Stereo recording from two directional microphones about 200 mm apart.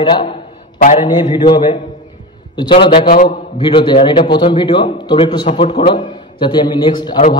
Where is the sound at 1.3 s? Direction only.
30° left (ahead or behind).